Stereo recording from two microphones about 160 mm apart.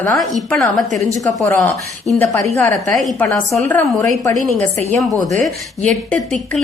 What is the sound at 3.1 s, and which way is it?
Speech, 20° left (ahead or behind).